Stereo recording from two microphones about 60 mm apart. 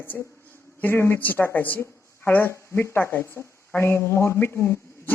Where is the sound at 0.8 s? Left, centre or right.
Left.